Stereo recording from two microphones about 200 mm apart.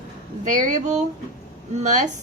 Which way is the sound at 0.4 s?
35° right (ahead or behind).